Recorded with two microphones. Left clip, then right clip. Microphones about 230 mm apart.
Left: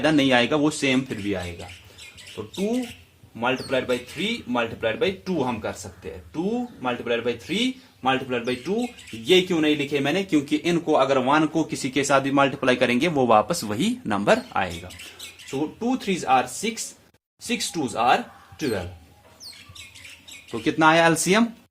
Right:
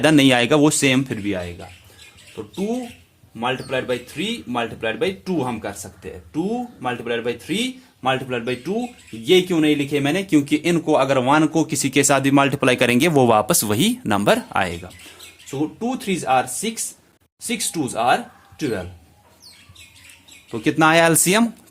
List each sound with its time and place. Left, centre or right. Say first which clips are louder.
0.0 s speech: right 4 dB; right
2.4 s speech: right 2 dB; right
3.7 s speech: right 1 dB; right
15.4 s speech: right 2 dB; right
20.5 s speech: right 2 dB; right